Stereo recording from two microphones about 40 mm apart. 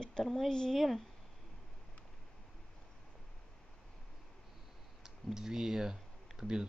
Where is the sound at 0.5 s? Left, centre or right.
Centre.